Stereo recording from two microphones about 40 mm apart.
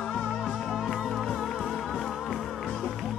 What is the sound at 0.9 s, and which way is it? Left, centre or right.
Music, centre.